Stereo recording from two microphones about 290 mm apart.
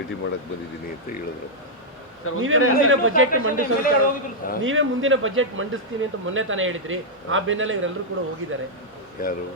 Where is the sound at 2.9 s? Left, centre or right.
Right.